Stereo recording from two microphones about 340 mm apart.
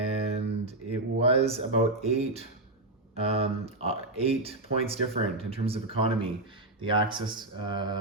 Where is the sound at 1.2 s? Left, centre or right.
Centre.